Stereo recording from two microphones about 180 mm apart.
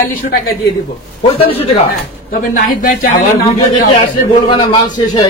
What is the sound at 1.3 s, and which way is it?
Speech, 30° left (ahead or behind).